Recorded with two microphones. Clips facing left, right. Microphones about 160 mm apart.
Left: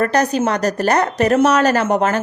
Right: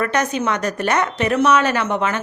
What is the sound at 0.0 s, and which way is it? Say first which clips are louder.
Speech: left 4 dB; 35° left (ahead or behind).